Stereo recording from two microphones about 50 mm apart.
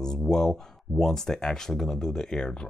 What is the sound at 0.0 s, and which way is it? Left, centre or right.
Speech, centre.